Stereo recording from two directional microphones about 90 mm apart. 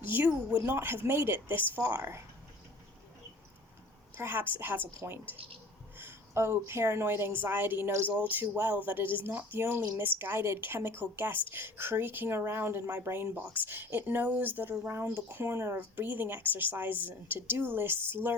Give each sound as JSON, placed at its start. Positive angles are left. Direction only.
{"t": 0.0, "sound": "a woman's voice", "side_deg": -20}
{"t": 4.2, "sound": "a woman's voice", "side_deg": -25}